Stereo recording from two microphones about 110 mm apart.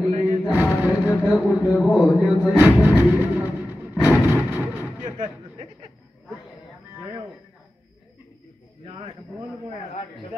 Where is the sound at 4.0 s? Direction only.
15° right (ahead or behind).